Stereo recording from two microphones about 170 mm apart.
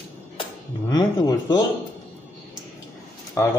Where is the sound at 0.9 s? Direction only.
20° left (ahead or behind).